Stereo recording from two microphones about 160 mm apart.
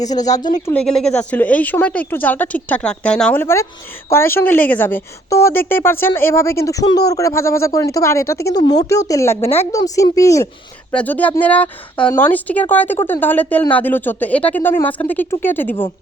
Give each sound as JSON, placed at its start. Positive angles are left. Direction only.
{"t": 0.0, "sound": "speech", "side_deg": 25}
{"t": 0.7, "sound": "speech", "side_deg": 5}